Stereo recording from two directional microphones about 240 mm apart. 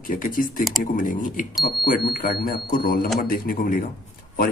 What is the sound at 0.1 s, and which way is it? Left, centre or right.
Speech, left.